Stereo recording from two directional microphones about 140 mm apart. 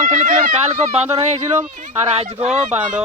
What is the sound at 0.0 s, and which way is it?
Speech, 60° right (ahead or behind).